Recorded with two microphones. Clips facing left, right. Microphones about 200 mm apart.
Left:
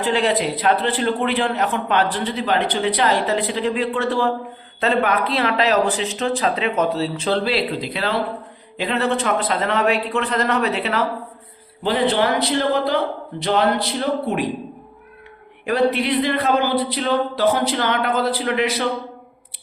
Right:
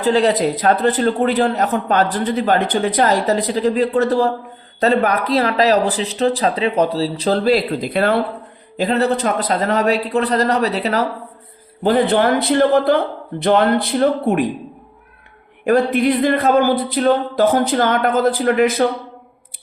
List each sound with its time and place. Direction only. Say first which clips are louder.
0.0 s a man's voice: right 4 dB; 40° right (ahead or behind)
8.8 s a man's voice: right 4 dB; 40° right (ahead or behind)
11.8 s speech: right 4 dB; 50° right (ahead or behind)
15.6 s speech: right 4 dB; 50° right (ahead or behind)